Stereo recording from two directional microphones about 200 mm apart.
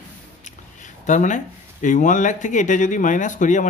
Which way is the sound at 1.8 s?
40° left (ahead or behind).